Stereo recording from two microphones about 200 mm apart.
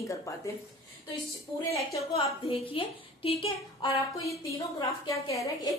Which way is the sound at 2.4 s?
25° left (ahead or behind).